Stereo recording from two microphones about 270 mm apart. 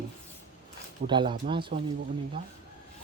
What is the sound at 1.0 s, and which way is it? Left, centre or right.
Speech, centre.